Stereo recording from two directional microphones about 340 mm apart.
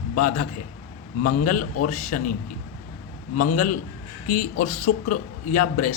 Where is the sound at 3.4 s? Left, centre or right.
Left.